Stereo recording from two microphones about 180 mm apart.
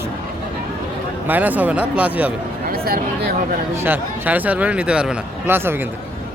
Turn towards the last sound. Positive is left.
turn(degrees=-10)  # may be behind; listen again after turning